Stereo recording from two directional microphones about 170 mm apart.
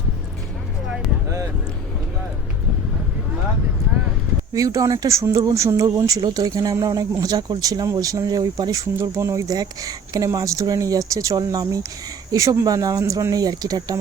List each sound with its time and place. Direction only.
4.5 s speech: 20° right (ahead or behind)